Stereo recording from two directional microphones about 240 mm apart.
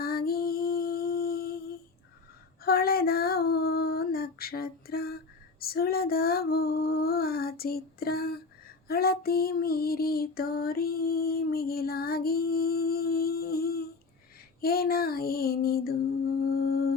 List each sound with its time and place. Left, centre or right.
0.0 s a sound: left
2.6 s female singing: left
8.9 s music: left
14.6 s child singing: left
16.4 s music: left